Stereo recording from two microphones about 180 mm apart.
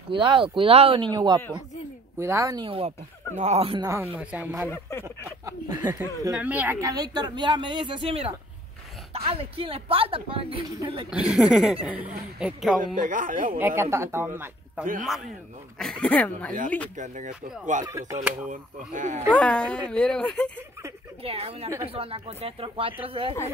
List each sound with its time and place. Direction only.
0.1 s speech: 30° right (ahead or behind)
3.8 s speech: 15° right (ahead or behind)
5.0 s a sound: 15° right (ahead or behind)
6.3 s speech: 10° right (ahead or behind); by 11.1 s 30° right (ahead or behind)
11.1 s speech: 5° right (ahead or behind)
12.8 s speech: 45° right (ahead or behind)
13.6 s speech: 10° right (ahead or behind)
15.8 s speech: 5° left (ahead or behind)
16.9 s speech: 45° right (ahead or behind)
17.8 s speech: 15° right (ahead or behind)
18.5 s speech: 45° right (ahead or behind)
19.3 s speech: 5° left (ahead or behind)
21.2 s speech: 35° right (ahead or behind)